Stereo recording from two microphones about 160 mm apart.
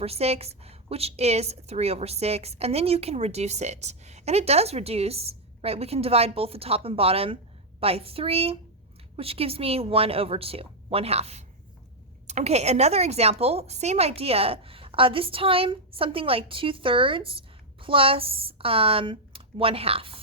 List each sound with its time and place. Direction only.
0.0 s a woman's voice: 40° right (ahead or behind)